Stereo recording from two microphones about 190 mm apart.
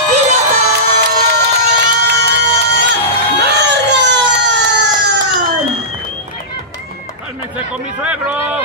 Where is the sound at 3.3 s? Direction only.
60° right (ahead or behind).